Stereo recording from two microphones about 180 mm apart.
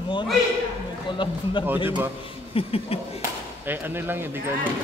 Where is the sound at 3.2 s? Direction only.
10° right (ahead or behind).